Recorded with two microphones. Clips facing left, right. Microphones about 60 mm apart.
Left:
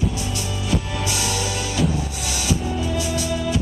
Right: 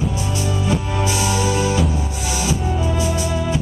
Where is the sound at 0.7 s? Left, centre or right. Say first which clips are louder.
Right 2 dB; right.